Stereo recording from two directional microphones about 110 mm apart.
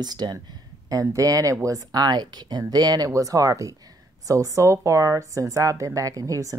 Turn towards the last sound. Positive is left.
turn(degrees=-30)  # may be behind; listen again after turning